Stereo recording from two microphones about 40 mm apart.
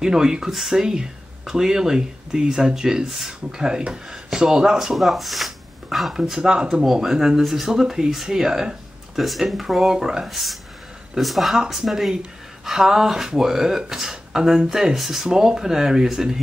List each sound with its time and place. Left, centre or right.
0.0 s speech: centre
4.9 s speech: centre
6.2 s speech: centre
7.8 s speech: centre
9.1 s speech: centre
9.8 s speech: centre
10.2 s speech: centre